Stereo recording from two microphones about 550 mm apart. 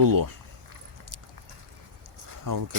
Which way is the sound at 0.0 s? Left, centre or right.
Right.